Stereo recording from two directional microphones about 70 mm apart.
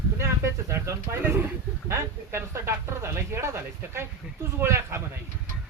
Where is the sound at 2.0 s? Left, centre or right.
Right.